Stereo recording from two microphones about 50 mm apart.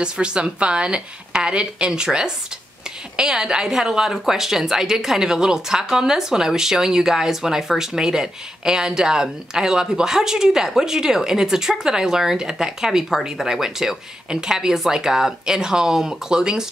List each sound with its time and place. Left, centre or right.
0.0 s a woman's voice: centre